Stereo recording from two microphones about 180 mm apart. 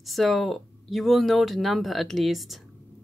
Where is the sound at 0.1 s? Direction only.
Centre (ahead or behind).